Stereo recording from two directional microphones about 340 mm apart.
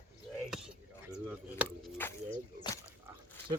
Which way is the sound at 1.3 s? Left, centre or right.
Centre.